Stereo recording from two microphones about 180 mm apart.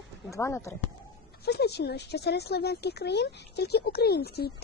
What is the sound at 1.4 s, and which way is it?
Speech, 65° left (ahead or behind).